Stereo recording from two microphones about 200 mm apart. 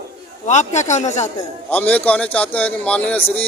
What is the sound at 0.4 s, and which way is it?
A man's voice, 35° left (ahead or behind).